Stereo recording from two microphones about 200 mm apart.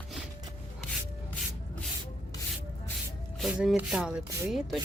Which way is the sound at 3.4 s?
Centre (ahead or behind).